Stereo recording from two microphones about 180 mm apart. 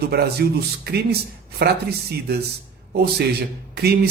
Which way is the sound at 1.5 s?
65° right (ahead or behind).